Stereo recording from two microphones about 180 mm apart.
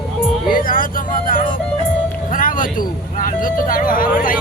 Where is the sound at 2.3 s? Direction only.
50° left (ahead or behind).